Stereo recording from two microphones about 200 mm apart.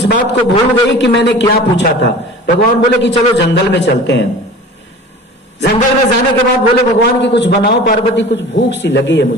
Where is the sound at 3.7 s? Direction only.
60° left (ahead or behind).